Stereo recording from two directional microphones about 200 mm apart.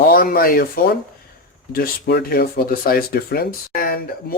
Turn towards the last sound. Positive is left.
turn(degrees=45)  # may be behind; listen again after turning